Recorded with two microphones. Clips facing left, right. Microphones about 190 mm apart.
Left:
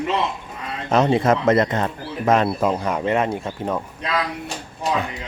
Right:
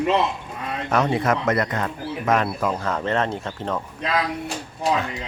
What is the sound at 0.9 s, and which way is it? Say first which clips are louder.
Speech: left 4 dB; 25° left (ahead or behind).